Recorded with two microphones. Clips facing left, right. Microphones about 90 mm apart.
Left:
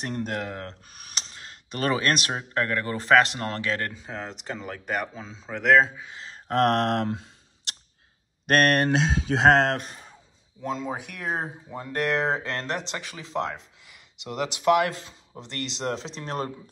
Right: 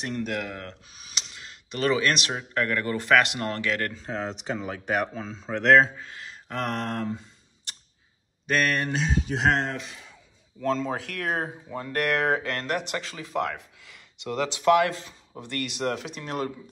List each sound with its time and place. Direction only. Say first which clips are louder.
0.0 s speech: even; 35° left (ahead or behind)
0.8 s a sound: left 1 dB; 50° left (ahead or behind)
1.2 s speech: left 1 dB; 40° left (ahead or behind)
4.0 s speech: right 4 dB; centre (ahead or behind)
6.0 s a sound: even; 25° left (ahead or behind)
6.3 s a sound: left 8 dB; 50° left (ahead or behind); by 7.7 s 75° left (ahead or behind)
8.5 s speech: left 5 dB; 70° left (ahead or behind); by 9.8 s 90° left
9.8 s speech: left 2 dB; 40° left (ahead or behind)
10.6 s speech: right 4 dB; 10° left (ahead or behind)
14.1 s speech: right 2 dB; 35° right (ahead or behind)
14.6 s speech: right 1 dB; 25° left (ahead or behind)